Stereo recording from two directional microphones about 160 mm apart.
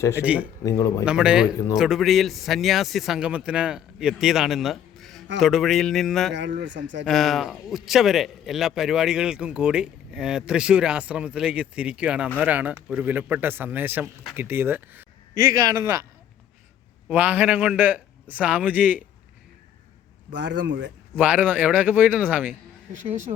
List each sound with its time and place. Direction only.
0.1 s a man's voice: 10° right (ahead or behind)
0.6 s speech: 20° left (ahead or behind)
1.0 s speech: 5° right (ahead or behind)
6.3 s speech: 90° right
7.0 s a man's voice: centre (ahead or behind)
15.4 s speech: 25° right (ahead or behind)
17.1 s a man's voice: 10° right (ahead or behind)
21.2 s a man's voice: 10° right (ahead or behind)